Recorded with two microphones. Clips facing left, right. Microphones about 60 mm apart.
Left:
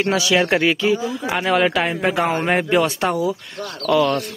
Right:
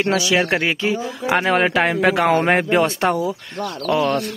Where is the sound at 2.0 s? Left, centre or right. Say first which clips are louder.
Right 3 dB; right.